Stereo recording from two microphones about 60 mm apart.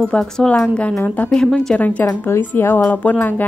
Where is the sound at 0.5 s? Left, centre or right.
Left.